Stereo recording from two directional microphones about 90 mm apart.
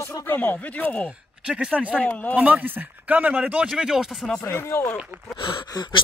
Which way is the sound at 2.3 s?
15° right (ahead or behind).